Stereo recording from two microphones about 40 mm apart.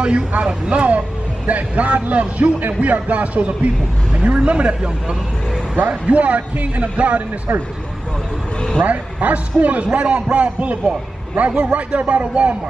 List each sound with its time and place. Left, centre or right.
0.4 s a man's voice: right
4.1 s speech: right
5.9 s a man's voice: right
8.8 s a man's voice: right